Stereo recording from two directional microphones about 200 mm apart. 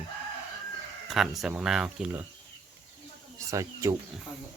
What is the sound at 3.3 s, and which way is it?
Speech, 15° right (ahead or behind).